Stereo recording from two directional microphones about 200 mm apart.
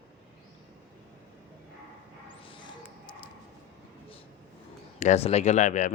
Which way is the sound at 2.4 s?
25° left (ahead or behind).